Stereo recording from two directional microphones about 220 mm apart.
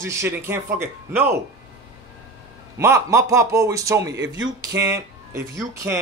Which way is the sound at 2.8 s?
15° right (ahead or behind).